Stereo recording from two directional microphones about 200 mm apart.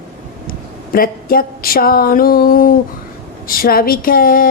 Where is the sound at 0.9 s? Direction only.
45° left (ahead or behind).